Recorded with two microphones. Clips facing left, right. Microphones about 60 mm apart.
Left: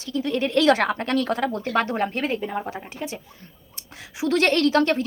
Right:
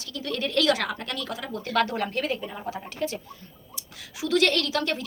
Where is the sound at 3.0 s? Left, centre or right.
Centre.